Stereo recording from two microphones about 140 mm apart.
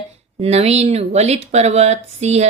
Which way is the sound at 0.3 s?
50° right (ahead or behind).